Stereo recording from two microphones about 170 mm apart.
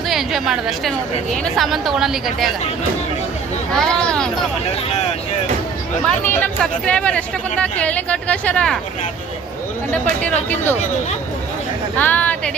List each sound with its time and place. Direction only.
0.1 s a woman's voice: centre (ahead or behind)
3.8 s speech: 5° left (ahead or behind)
6.4 s speech: 5° left (ahead or behind)
10.2 s speech: 10° left (ahead or behind)
11.9 s speech: 10° left (ahead or behind)